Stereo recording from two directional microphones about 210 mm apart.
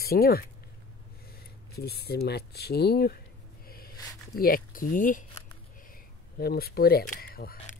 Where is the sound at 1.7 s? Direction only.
50° left (ahead or behind).